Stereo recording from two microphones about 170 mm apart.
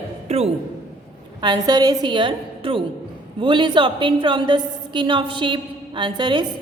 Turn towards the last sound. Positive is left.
turn(degrees=-30)  # may be behind; listen again after turning